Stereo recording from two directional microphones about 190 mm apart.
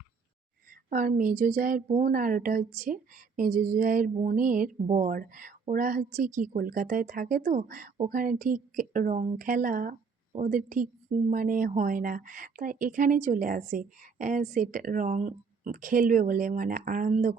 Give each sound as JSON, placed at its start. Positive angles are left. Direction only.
{"t": 0.7, "sound": "a woman's voice", "side_deg": -45}